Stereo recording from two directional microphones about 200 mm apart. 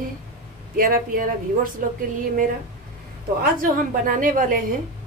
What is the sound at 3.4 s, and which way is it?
A woman's voice, 45° right (ahead or behind).